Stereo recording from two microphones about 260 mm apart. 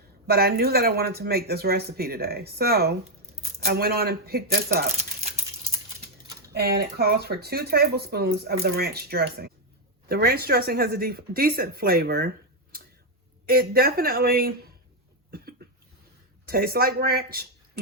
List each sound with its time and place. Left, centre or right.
0.3 s speech: right
6.5 s speech: right
13.4 s speech: right
16.5 s speech: right